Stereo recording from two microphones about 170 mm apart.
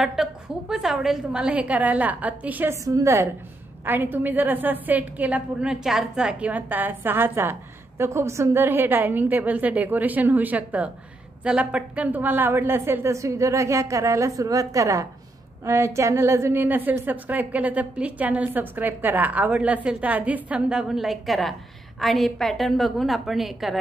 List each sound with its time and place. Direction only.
0.0 s a woman's voice: 5° right (ahead or behind)